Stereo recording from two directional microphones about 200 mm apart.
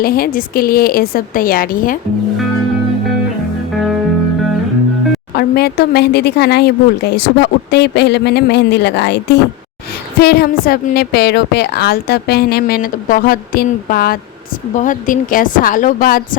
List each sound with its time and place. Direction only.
0.0 s a woman's voice: 50° left (ahead or behind)
5.3 s a woman's voice: 50° left (ahead or behind)